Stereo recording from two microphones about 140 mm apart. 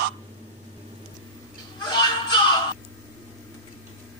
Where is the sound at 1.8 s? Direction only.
30° left (ahead or behind).